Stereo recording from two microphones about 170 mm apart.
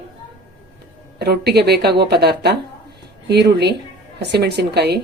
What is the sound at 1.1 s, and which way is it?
A woman's voice, 75° right (ahead or behind).